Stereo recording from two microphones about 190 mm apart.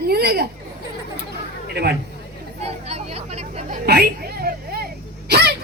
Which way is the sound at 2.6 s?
35° right (ahead or behind).